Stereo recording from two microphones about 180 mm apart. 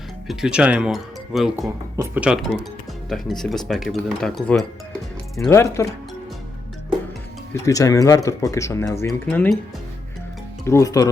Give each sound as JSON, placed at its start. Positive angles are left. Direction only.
{"t": 0.3, "sound": "speech", "side_deg": -5}
{"t": 1.6, "sound": "speech", "side_deg": -15}
{"t": 5.5, "sound": "speech", "side_deg": 15}
{"t": 7.5, "sound": "speech", "side_deg": 20}
{"t": 10.7, "sound": "speech", "side_deg": 15}